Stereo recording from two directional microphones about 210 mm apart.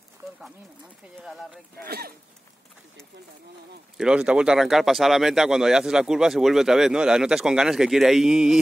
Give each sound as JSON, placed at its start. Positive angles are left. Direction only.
{"t": 1.9, "sound": "speech", "side_deg": -45}
{"t": 4.0, "sound": "speech", "side_deg": -5}